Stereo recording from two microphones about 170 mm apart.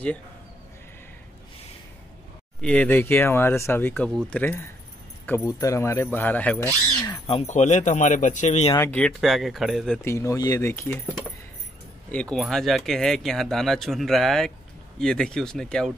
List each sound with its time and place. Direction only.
2.6 s speech: 5° left (ahead or behind)
7.0 s bird: 25° left (ahead or behind)
7.4 s speech: 45° left (ahead or behind)
8.7 s speech: 10° left (ahead or behind)
10.0 s speech: 15° left (ahead or behind)